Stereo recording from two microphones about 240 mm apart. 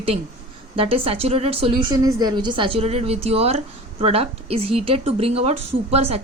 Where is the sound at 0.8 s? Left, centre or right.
Right.